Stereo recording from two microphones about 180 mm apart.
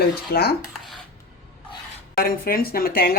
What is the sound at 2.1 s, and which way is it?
Speech, 55° left (ahead or behind).